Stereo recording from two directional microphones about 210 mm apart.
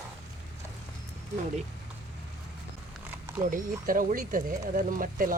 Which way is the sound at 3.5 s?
40° right (ahead or behind).